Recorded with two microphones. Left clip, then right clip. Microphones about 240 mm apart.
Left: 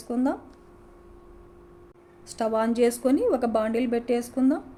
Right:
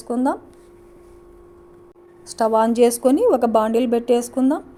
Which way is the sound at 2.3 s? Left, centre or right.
Right.